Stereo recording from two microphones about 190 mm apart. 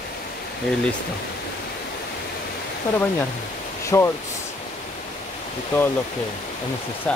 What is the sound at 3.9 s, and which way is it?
Speech, 15° left (ahead or behind).